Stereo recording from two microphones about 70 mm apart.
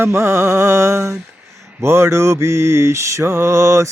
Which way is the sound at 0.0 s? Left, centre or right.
Right.